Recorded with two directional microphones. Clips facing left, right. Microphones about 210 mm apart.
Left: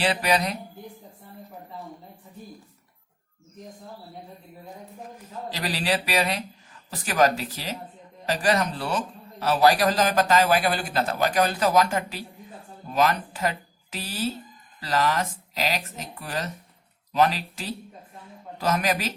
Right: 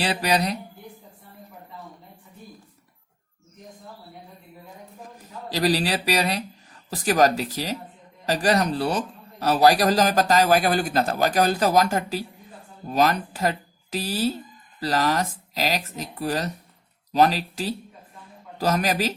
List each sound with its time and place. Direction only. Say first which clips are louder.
0.0 s a man's voice: even; 35° right (ahead or behind)
5.5 s a man's voice: right 5 dB; 40° right (ahead or behind)